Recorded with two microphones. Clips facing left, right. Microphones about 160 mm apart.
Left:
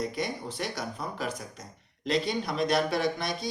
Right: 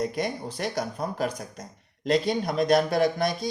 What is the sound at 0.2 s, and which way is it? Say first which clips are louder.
A man's voice: right 3 dB; 45° right (ahead or behind).